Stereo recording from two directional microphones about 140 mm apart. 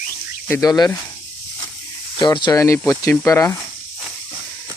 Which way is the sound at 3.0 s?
20° left (ahead or behind).